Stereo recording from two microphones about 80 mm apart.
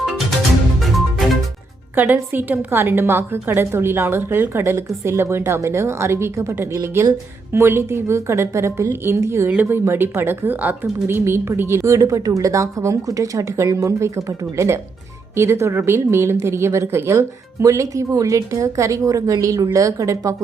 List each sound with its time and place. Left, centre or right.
0.8 s music: centre
2.0 s a woman's voice: right